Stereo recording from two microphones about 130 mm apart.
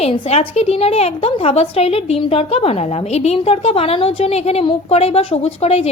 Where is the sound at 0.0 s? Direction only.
50° left (ahead or behind).